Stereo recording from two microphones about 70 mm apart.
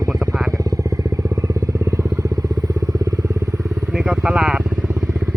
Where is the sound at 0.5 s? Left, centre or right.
Right.